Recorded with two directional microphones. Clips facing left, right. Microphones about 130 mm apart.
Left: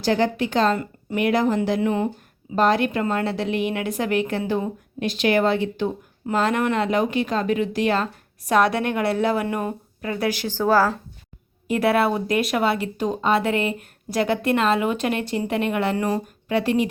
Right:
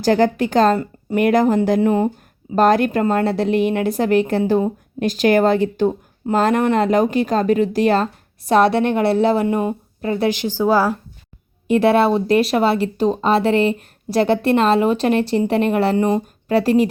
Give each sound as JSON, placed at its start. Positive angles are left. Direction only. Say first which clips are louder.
{"t": 0.0, "sound": "a woman's voice", "louder": "right 5 dB", "side_deg": -45}
{"t": 11.7, "sound": "speech", "louder": "right 5 dB", "side_deg": -25}
{"t": 16.0, "sound": "speech", "louder": "right 6 dB", "side_deg": -25}
{"t": 16.5, "sound": "speech", "louder": "right 6 dB", "side_deg": -35}